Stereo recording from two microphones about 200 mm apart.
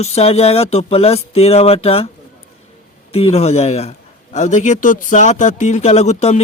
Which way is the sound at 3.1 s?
30° left (ahead or behind).